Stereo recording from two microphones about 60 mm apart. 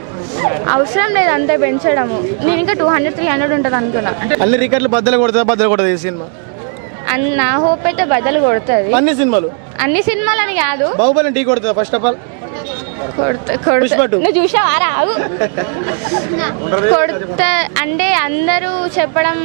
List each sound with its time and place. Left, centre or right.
0.3 s speech: right
13.1 s speech: right